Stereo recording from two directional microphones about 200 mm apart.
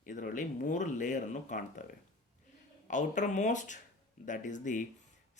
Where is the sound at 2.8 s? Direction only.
40° left (ahead or behind).